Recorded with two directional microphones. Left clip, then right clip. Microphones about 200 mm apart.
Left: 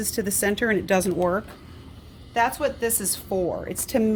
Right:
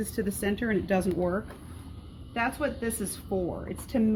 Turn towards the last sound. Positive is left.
turn(degrees=65)  # may be behind; listen again after turning